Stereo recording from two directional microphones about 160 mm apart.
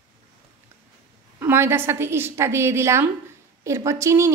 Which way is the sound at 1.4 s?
15° right (ahead or behind).